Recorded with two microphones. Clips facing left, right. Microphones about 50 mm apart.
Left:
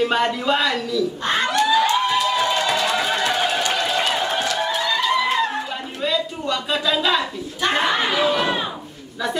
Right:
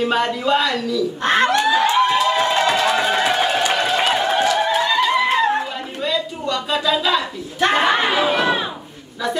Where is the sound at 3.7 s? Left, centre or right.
Right.